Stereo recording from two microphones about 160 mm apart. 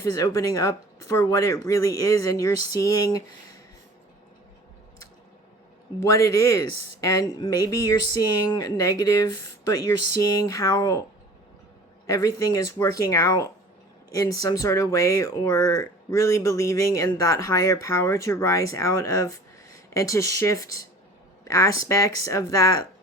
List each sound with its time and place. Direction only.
0.0 s speech: 20° left (ahead or behind)
6.0 s speech: 20° left (ahead or behind)
12.0 s speech: 20° left (ahead or behind)